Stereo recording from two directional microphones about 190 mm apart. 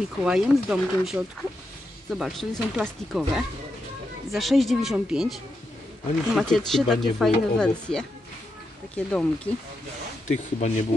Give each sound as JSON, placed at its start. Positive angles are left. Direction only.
{"t": 0.2, "sound": "speech", "side_deg": -5}
{"t": 10.2, "sound": "speech", "side_deg": 40}